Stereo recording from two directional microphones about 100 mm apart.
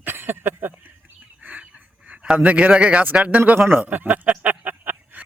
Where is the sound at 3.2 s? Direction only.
15° right (ahead or behind).